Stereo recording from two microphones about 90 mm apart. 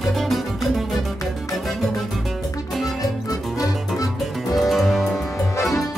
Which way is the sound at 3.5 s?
40° left (ahead or behind).